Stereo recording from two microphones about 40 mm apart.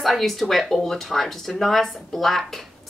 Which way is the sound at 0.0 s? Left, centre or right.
Centre.